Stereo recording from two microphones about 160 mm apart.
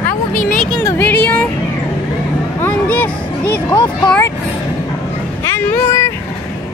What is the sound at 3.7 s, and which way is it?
Speech, 30° left (ahead or behind).